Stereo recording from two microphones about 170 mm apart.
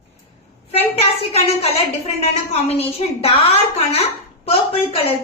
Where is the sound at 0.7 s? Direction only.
35° left (ahead or behind).